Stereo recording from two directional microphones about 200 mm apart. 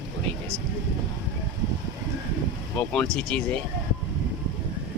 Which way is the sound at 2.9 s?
5° left (ahead or behind).